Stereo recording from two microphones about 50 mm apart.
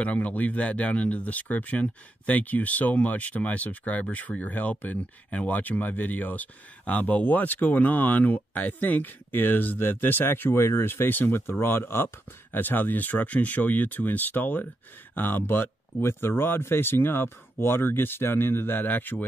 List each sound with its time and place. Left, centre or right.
0.0 s speech: left
12.5 s speech: left